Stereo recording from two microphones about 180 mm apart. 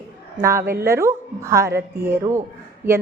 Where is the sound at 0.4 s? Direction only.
15° right (ahead or behind).